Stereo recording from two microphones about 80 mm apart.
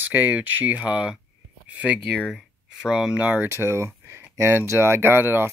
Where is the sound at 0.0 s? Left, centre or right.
Right.